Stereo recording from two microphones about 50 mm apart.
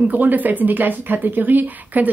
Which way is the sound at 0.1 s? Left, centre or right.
Right.